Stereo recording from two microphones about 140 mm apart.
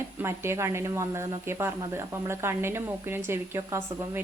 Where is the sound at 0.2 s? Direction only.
20° right (ahead or behind).